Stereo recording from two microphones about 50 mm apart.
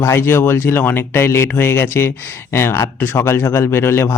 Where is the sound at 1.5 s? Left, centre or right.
Left.